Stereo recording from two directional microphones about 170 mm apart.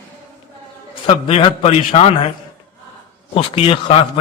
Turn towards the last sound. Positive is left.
turn(degrees=35)  # may be behind; listen again after turning